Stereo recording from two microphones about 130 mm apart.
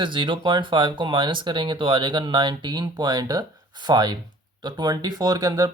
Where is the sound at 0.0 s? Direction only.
40° right (ahead or behind).